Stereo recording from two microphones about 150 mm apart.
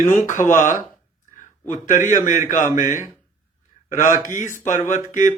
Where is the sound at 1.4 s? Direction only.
55° left (ahead or behind).